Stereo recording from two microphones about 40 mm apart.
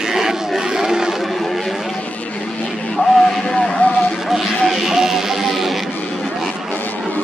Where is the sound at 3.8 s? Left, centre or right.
Left.